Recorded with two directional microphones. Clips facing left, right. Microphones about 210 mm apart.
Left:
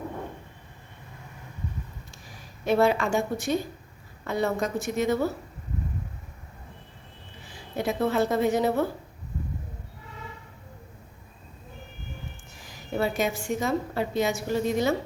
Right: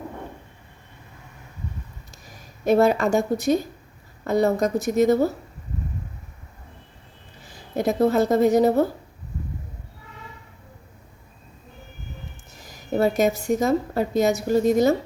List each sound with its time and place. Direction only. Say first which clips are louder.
2.6 s a woman's voice: right 4 dB; 40° right (ahead or behind)
7.5 s speech: right 5 dB; 40° right (ahead or behind)
12.7 s a woman's voice: right 6 dB; 40° right (ahead or behind)